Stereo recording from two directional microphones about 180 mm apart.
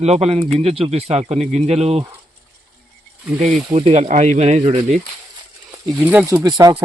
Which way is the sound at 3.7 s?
35° right (ahead or behind).